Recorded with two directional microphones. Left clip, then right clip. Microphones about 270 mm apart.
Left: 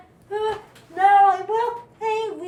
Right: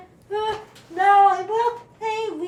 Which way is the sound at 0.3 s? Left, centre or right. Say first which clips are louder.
Right 1 dB; centre.